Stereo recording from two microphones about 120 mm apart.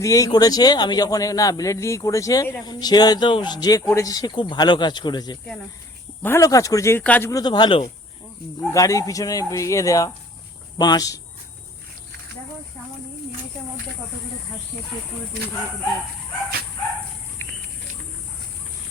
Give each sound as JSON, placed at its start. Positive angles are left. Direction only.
{"t": 0.0, "sound": "speech", "side_deg": 30}
{"t": 6.2, "sound": "speech", "side_deg": 25}
{"t": 7.0, "sound": "a man's voice", "side_deg": 10}
{"t": 7.3, "sound": "speech", "side_deg": 35}
{"t": 8.7, "sound": "speech", "side_deg": 30}